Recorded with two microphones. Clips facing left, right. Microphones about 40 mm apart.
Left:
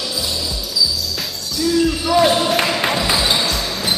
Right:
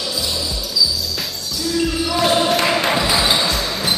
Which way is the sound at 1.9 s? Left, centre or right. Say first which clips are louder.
Left 2 dB; centre.